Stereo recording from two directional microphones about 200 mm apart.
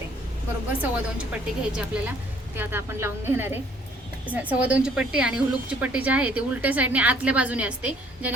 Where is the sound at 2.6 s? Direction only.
10° right (ahead or behind).